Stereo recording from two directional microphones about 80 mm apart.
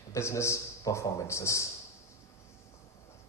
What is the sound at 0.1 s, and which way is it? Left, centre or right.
A man's voice, left.